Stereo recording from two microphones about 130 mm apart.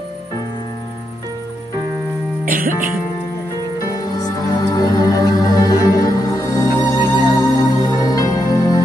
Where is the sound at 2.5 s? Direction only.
90° right.